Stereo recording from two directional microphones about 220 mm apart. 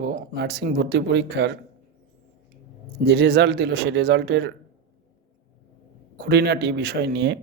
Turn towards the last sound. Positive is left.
turn(degrees=-50)  # may be behind; listen again after turning